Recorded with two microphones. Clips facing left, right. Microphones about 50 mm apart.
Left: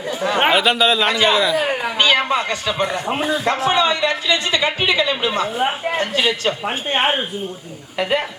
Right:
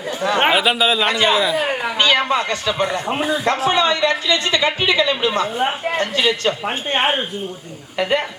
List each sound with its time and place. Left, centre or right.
0.1 s speech: centre
2.0 s a man's voice: centre
2.8 s a man's voice: centre